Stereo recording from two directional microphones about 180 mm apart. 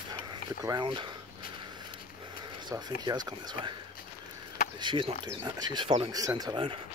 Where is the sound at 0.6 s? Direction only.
25° right (ahead or behind).